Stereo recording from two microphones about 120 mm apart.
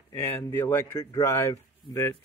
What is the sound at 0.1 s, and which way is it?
Speech, 20° left (ahead or behind).